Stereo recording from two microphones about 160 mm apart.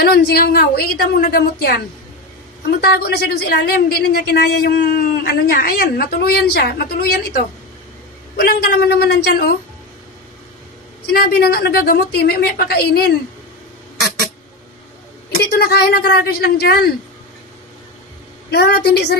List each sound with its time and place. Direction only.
0.0 s a woman's voice: 80° left
11.1 s a woman's voice: 75° left (ahead or behind)
15.6 s a woman's voice: 80° left
18.5 s a woman's voice: 90° left